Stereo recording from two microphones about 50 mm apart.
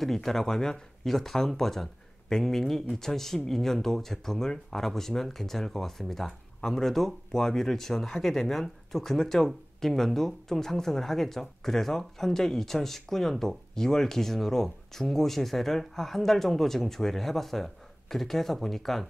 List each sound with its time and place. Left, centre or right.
0.0 s speech: centre